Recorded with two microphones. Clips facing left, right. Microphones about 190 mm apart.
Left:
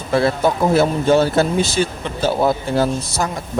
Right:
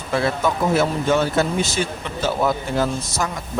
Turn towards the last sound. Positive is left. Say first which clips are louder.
# left 3 dB
turn(degrees=30)  # may be behind; listen again after turning